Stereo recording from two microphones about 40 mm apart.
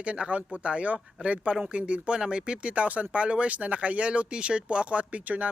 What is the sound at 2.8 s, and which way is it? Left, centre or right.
Speech, right.